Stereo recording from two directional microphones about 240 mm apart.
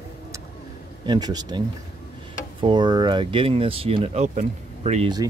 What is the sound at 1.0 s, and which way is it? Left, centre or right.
Speech, centre.